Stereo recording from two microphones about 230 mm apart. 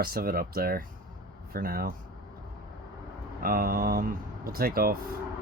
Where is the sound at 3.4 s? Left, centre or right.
Right.